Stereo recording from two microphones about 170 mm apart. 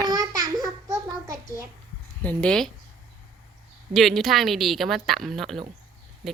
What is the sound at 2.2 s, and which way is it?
Speech, 5° left (ahead or behind).